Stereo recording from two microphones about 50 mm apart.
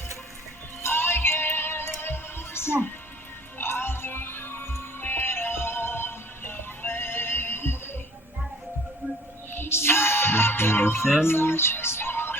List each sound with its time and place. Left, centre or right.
0.8 s music: left
9.5 s music: left
11.0 s speech: centre
11.3 s music: left